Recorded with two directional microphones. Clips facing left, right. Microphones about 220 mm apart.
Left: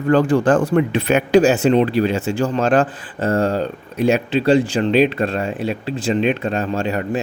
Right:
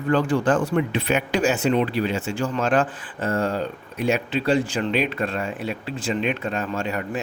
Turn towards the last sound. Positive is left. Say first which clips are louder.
# left 6 dB
turn(degrees=30)  # may be behind; listen again after turning